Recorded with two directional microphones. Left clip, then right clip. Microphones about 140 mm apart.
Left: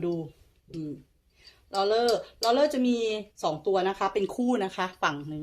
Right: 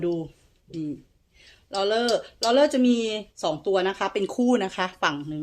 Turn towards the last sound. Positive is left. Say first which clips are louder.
# right 3 dB
turn(degrees=-30)  # may be behind; listen again after turning